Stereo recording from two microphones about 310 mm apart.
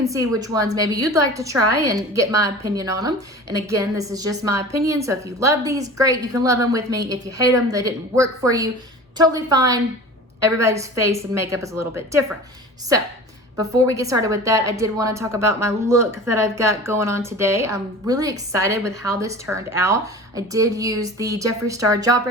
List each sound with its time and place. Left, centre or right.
0.0 s a woman's voice: centre
1.5 s a woman's voice: right
2.1 s a woman's voice: centre
13.6 s a woman's voice: centre